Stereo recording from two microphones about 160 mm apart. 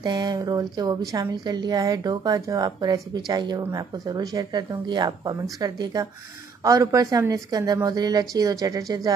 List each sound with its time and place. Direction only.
0.0 s speech: 25° right (ahead or behind)